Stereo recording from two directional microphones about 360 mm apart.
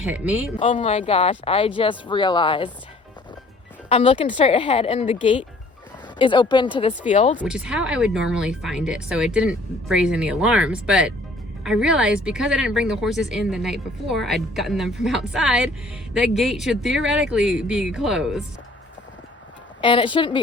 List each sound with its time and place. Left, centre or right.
0.0 s speech: centre
0.6 s speech: centre
3.8 s speech: centre
7.3 s speech: centre
19.8 s speech: centre